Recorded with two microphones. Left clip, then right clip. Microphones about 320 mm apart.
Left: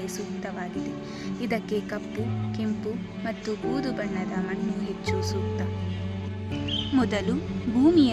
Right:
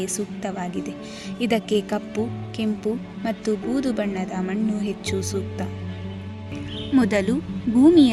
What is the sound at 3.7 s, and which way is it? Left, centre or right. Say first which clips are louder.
Speech: right 5 dB; right.